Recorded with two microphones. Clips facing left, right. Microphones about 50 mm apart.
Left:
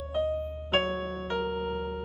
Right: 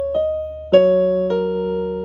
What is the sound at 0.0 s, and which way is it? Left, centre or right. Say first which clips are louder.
Music: right 10 dB; left.